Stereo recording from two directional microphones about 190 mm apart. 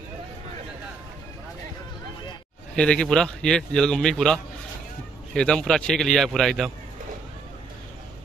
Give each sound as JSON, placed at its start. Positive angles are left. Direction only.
{"t": 2.7, "sound": "a man's voice", "side_deg": 5}